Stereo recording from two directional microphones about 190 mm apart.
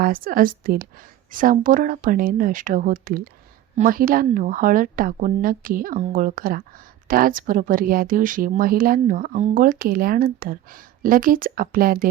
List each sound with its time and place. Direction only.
0.0 s a woman's voice: 50° right (ahead or behind)